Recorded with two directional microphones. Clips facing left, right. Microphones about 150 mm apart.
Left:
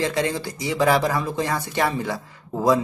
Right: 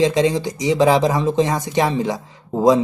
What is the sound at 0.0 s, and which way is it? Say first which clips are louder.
Speech: right 7 dB; 15° right (ahead or behind).